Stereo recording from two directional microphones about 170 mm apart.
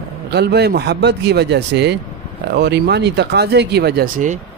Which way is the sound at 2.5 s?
75° right (ahead or behind).